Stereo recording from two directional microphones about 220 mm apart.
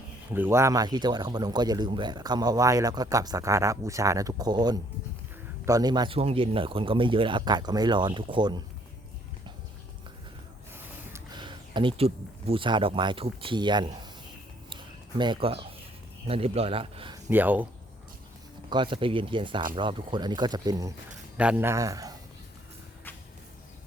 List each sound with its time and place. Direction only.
0.3 s speech: 10° right (ahead or behind)
10.7 s speech: 15° right (ahead or behind)
14.7 s a sound: 20° right (ahead or behind)
16.2 s speech: 25° right (ahead or behind)
17.2 s speech: 10° right (ahead or behind)
18.7 s speech: 20° right (ahead or behind)
21.3 s speech: 5° right (ahead or behind)